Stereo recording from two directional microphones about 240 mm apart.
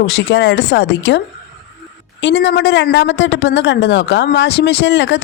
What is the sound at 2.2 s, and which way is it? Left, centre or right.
Speech, left.